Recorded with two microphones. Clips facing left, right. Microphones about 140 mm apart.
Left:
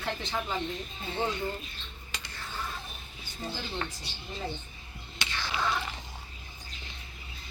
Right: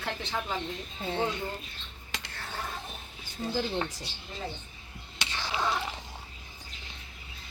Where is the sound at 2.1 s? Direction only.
65° right (ahead or behind).